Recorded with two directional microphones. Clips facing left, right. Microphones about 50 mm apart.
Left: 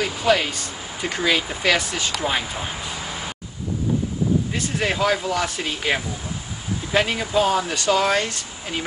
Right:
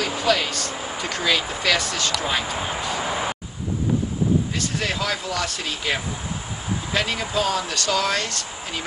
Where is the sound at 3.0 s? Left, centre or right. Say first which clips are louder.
Right 6 dB; right.